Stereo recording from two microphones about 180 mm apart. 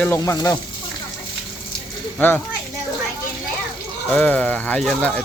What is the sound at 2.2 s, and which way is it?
Speech, 10° left (ahead or behind).